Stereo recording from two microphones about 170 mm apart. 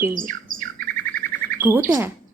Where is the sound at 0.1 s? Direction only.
50° right (ahead or behind).